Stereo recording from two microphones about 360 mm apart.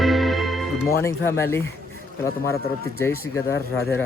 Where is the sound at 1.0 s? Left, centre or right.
Centre.